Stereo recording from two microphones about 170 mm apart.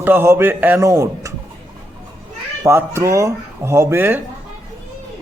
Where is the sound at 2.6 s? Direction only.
15° right (ahead or behind).